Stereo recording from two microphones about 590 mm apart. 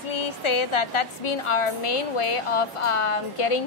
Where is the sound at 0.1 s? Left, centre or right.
Left.